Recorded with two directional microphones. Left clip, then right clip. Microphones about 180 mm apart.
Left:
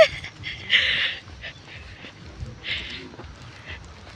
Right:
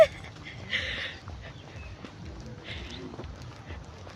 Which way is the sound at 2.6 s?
Centre (ahead or behind).